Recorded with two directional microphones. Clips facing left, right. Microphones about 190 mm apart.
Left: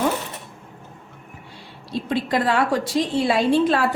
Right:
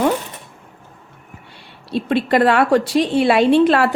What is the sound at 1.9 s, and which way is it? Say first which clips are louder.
A woman's voice: right 6 dB; 65° right (ahead or behind).